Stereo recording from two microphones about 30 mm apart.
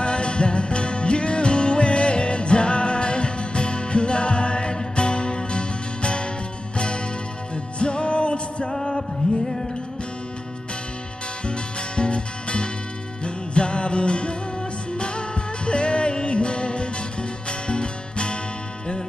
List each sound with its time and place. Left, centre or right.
0.0 s music: left
7.8 s music: left
8.7 s music: centre
11.4 s music: left